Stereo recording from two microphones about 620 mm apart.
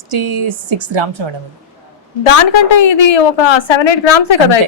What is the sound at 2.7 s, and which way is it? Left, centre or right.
A woman's voice, left.